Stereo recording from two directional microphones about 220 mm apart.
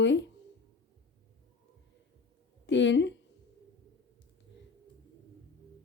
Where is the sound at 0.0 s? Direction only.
55° left (ahead or behind).